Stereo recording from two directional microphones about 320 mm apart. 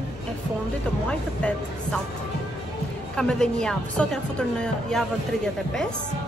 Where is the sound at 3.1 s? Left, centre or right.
Centre.